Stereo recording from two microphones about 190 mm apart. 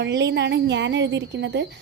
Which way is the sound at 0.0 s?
65° right (ahead or behind).